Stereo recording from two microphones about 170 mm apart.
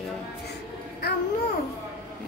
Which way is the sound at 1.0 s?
70° left (ahead or behind).